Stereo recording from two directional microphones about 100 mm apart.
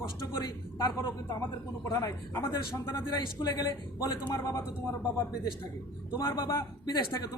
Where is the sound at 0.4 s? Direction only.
45° left (ahead or behind).